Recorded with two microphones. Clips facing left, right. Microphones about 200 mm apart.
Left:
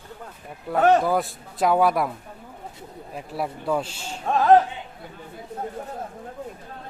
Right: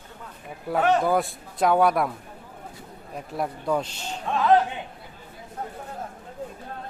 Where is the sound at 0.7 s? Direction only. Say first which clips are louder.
Left 2 dB; centre (ahead or behind).